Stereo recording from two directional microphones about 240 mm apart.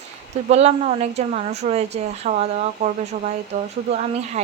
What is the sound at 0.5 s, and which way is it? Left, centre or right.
A woman's voice, right.